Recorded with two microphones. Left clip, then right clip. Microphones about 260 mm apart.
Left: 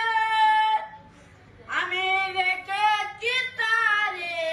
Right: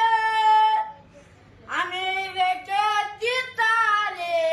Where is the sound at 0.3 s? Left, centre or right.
Centre.